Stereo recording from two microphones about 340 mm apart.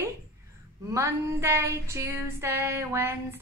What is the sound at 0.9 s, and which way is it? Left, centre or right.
Female singing, centre.